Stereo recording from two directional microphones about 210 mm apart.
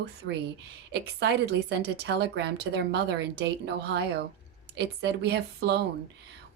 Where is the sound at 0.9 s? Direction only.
50° right (ahead or behind).